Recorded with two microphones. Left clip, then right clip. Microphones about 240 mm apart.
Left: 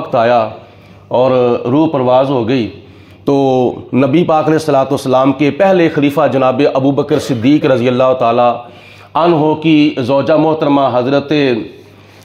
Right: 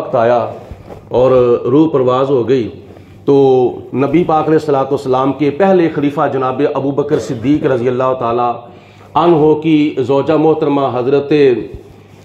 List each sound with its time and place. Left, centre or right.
0.1 s a man's voice: left